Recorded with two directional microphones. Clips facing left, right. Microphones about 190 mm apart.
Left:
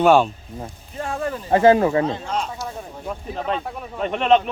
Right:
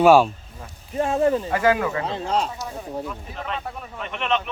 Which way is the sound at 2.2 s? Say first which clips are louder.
Right 3 dB; 35° right (ahead or behind).